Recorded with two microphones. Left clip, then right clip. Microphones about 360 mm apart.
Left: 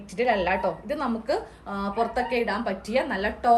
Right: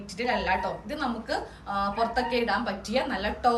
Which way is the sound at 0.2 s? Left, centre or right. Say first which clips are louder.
Left 3 dB; centre.